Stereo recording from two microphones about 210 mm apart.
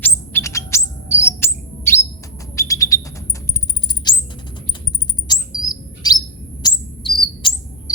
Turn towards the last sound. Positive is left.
turn(degrees=20)  # may be behind; listen again after turning